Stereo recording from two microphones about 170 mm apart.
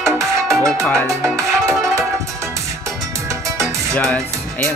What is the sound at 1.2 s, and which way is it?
Music, 20° right (ahead or behind).